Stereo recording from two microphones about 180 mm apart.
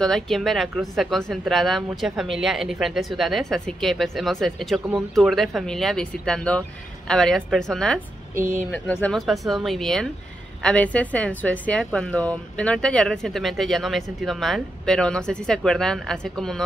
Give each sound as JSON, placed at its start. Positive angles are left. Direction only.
{"t": 0.0, "sound": "speech", "side_deg": 0}
{"t": 8.4, "sound": "speech", "side_deg": -50}
{"t": 8.7, "sound": "speech", "side_deg": 10}